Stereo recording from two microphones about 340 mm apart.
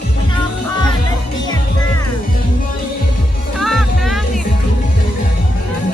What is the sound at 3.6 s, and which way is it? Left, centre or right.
Music, centre.